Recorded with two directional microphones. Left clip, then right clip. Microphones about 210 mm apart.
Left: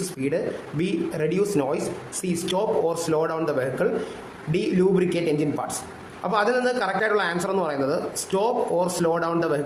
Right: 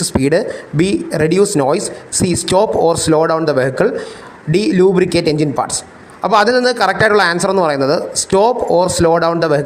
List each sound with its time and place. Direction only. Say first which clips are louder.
0.2 s a man's voice: right 12 dB; 40° right (ahead or behind)